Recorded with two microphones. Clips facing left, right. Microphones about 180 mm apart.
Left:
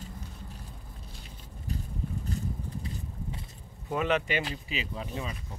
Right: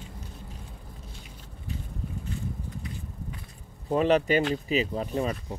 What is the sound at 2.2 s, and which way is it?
Vehicle, 40° left (ahead or behind).